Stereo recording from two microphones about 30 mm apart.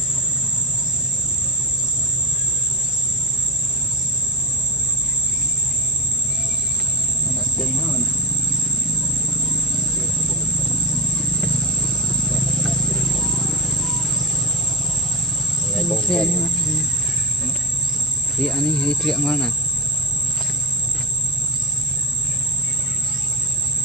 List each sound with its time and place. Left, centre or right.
7.8 s insect: centre
9.2 s vehicle: centre
11.5 s a sound: left
12.7 s insect: centre
15.7 s cricket: centre
16.0 s cricket: left
16.3 s a sound: centre
18.3 s speech: centre